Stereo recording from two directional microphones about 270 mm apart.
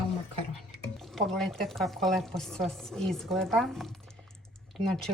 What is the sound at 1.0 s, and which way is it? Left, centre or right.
A woman's voice, centre.